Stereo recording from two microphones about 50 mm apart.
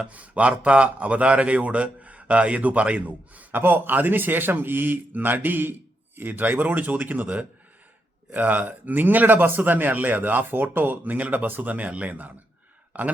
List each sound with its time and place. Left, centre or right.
0.0 s speech: right
3.5 s speech: right